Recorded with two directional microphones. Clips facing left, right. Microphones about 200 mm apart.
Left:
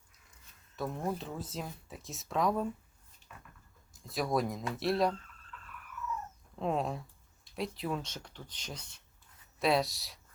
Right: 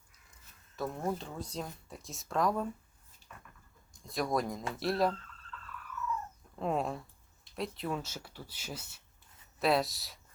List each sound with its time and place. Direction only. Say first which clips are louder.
0.8 s speech: even; centre (ahead or behind)
3.2 s a sound: even; 35° right (ahead or behind)
3.9 s speech: left 1 dB; centre (ahead or behind)
5.5 s dog: right 3 dB; 15° left (ahead or behind)
6.6 s speech: even; centre (ahead or behind)